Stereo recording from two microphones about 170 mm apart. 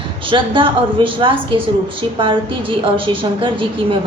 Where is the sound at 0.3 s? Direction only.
30° right (ahead or behind).